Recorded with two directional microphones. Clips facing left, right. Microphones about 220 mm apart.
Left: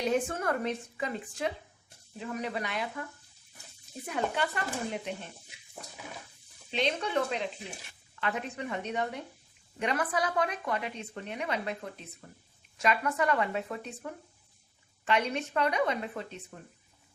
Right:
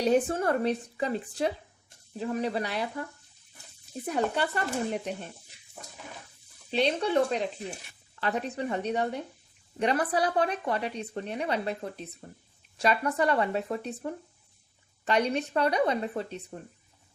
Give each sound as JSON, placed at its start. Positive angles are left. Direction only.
{"t": 0.0, "sound": "speech", "side_deg": -35}
{"t": 4.0, "sound": "speech", "side_deg": -35}
{"t": 6.7, "sound": "speech", "side_deg": -35}